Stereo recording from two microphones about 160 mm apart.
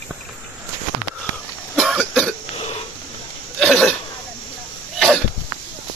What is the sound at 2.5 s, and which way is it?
Burping, 40° left (ahead or behind).